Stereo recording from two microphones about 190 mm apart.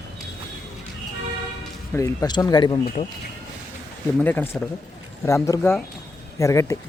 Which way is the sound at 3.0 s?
35° left (ahead or behind).